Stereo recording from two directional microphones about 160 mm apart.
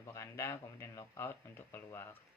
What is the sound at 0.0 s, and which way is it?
Speech, 20° left (ahead or behind).